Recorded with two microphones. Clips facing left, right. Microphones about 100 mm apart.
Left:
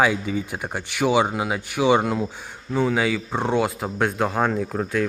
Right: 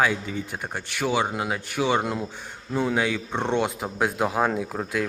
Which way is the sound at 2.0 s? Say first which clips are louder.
Left 4 dB; centre (ahead or behind).